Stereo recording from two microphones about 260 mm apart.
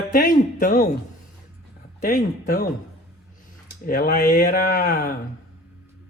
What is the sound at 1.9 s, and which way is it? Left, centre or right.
Speech, left.